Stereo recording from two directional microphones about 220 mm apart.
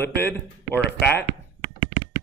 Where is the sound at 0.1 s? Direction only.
10° left (ahead or behind).